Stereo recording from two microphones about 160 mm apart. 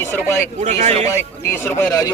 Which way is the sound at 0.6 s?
45° right (ahead or behind).